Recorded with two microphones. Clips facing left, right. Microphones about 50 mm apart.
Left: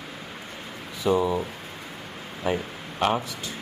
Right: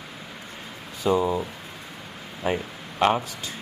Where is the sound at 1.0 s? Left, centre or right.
Right.